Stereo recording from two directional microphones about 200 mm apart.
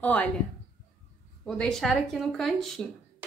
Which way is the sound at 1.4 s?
5° left (ahead or behind).